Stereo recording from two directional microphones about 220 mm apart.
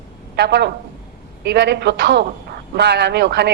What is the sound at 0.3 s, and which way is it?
A woman's voice, 50° right (ahead or behind).